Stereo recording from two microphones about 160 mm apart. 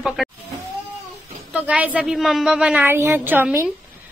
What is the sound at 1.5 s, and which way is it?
A woman's voice, 10° right (ahead or behind).